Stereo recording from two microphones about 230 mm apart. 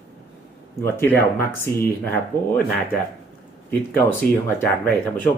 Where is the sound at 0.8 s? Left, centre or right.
Centre.